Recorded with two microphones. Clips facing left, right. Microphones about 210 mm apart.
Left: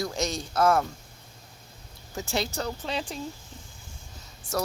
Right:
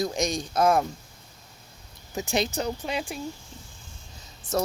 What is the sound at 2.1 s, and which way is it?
Speech, 20° right (ahead or behind).